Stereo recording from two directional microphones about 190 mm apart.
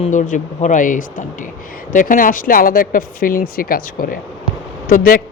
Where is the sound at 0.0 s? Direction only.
40° left (ahead or behind).